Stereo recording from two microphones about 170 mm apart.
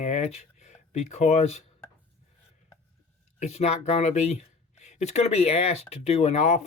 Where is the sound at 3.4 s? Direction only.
40° left (ahead or behind).